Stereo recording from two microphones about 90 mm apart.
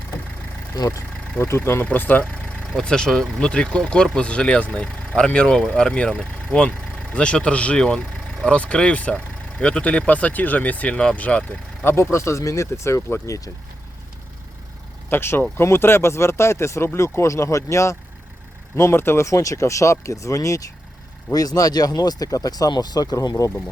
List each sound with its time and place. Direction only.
0.7 s speech: 35° left (ahead or behind)
1.4 s speech: 25° left (ahead or behind)
11.9 s speech: 30° left (ahead or behind)
15.1 s speech: 25° left (ahead or behind); by 23.3 s 45° left (ahead or behind)